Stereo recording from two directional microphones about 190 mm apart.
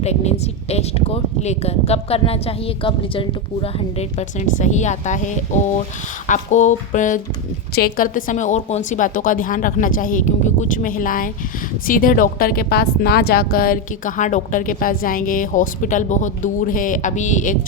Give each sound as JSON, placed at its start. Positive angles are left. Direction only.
{"t": 0.0, "sound": "a woman's voice", "side_deg": 35}